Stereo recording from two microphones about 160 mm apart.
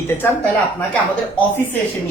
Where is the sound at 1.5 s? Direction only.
10° left (ahead or behind).